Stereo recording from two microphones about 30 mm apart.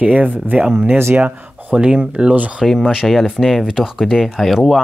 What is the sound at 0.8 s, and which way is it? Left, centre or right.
Speech, right.